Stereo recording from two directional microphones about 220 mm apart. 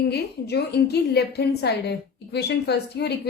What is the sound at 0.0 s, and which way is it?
A woman's voice, 50° left (ahead or behind).